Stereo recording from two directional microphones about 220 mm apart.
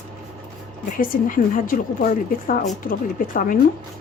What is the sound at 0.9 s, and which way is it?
Speech, 40° left (ahead or behind).